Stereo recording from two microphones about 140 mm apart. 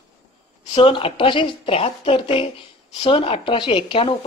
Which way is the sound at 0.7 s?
40° left (ahead or behind).